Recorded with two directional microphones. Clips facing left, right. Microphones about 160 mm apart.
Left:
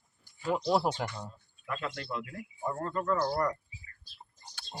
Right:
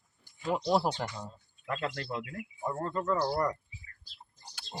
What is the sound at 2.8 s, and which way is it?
Speech, 20° right (ahead or behind).